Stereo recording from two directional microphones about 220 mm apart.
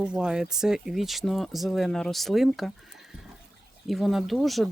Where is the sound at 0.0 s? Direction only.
5° right (ahead or behind).